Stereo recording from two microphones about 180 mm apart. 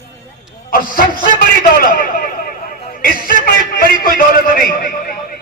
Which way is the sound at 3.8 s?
55° left (ahead or behind).